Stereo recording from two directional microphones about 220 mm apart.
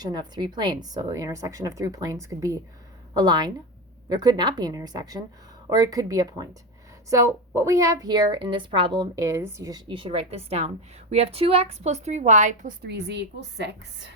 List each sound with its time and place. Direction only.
0.0 s a woman's voice: 20° right (ahead or behind)
12.8 s a woman's voice: 50° right (ahead or behind)